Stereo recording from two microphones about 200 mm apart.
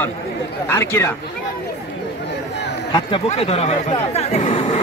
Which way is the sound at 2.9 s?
25° left (ahead or behind).